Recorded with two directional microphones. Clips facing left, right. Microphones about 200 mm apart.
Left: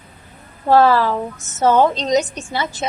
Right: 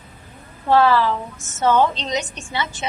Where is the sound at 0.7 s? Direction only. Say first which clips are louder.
Left 3 dB; 40° left (ahead or behind).